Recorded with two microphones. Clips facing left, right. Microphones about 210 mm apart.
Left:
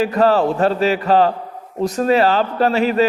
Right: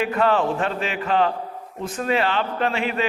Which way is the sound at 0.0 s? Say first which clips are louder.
Left 5 dB; 35° left (ahead or behind).